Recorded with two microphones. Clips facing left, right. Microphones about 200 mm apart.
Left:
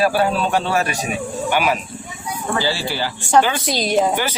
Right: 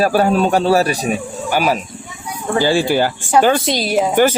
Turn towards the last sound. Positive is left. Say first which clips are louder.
# right 9 dB
turn(degrees=-50)  # may be behind; listen again after turning